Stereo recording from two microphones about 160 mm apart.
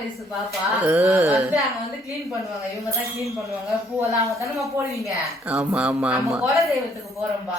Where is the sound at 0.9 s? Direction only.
10° right (ahead or behind).